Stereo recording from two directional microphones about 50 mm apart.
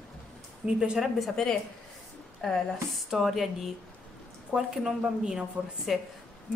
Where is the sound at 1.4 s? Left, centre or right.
Centre.